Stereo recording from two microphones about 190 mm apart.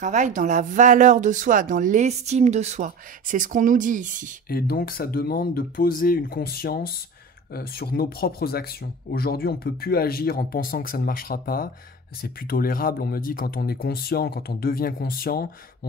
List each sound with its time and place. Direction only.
0.0 s speech: 40° right (ahead or behind)
4.5 s speech: 50° left (ahead or behind)